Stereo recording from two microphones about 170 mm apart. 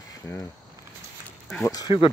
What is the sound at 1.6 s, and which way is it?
Speech, 25° left (ahead or behind).